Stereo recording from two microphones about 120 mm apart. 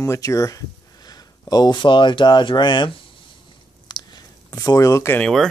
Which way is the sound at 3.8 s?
35° left (ahead or behind).